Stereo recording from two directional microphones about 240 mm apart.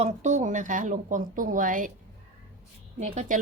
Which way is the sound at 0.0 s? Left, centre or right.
Right.